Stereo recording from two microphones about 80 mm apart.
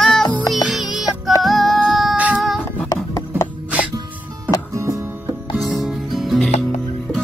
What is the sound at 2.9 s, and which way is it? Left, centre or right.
Rub, left.